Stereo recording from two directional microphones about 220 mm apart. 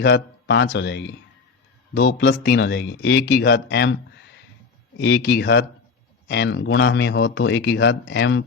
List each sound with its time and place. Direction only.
0.0 s speech: 50° left (ahead or behind)
4.9 s speech: 50° left (ahead or behind)